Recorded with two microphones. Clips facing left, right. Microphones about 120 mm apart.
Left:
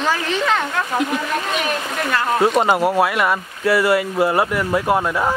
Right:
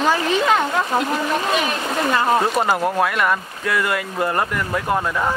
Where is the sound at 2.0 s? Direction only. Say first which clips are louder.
Right 3 dB; 20° right (ahead or behind).